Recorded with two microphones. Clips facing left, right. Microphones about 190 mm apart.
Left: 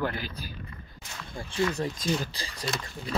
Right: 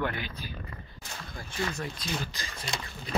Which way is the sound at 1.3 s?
30° left (ahead or behind).